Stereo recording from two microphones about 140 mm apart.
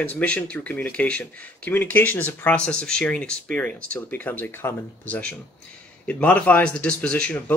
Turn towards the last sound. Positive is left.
turn(degrees=10)  # may be behind; listen again after turning